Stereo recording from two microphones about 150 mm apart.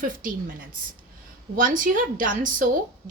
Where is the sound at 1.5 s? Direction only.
65° right (ahead or behind).